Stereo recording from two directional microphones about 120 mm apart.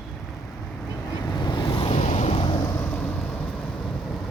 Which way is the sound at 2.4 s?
35° left (ahead or behind).